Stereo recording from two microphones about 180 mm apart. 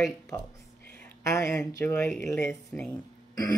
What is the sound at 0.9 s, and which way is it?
Speech, 15° left (ahead or behind).